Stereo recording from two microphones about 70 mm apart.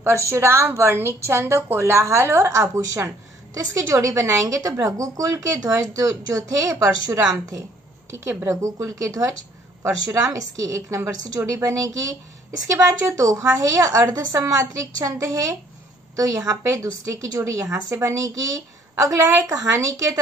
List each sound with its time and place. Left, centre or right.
0.0 s a woman's voice: right
8.1 s speech: right